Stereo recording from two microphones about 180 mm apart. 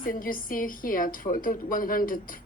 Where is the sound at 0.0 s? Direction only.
50° left (ahead or behind).